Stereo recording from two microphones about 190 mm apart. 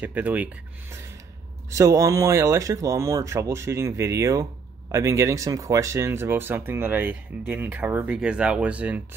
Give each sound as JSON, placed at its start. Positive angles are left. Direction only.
{"t": 0.0, "sound": "speech", "side_deg": -10}
{"t": 1.7, "sound": "speech", "side_deg": -15}